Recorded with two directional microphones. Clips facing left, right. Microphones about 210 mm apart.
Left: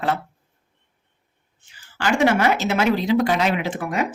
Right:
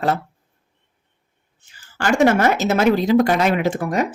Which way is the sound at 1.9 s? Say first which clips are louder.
Right 3 dB; 45° right (ahead or behind).